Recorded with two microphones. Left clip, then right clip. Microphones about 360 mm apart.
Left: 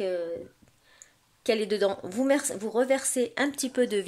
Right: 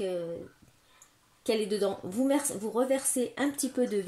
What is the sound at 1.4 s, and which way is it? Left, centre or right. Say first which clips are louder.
A woman's voice: left 3 dB; left.